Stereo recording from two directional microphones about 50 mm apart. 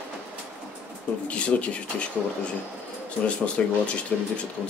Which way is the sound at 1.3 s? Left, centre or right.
Left.